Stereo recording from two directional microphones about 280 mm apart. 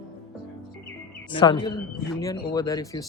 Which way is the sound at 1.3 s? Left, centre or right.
Centre.